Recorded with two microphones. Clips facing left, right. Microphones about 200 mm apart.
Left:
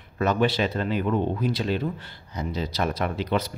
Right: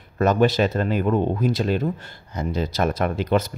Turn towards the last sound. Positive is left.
turn(degrees=-45)  # may be behind; listen again after turning